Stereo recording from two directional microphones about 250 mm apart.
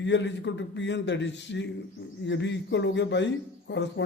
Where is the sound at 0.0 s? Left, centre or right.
Left.